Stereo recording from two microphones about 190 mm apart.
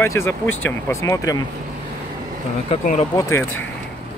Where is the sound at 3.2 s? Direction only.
15° left (ahead or behind).